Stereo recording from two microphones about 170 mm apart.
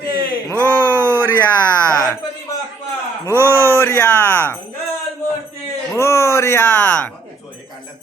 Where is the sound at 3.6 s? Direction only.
15° left (ahead or behind).